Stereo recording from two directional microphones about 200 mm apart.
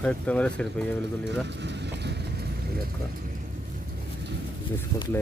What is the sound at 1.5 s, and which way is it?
Vehicle, 60° right (ahead or behind).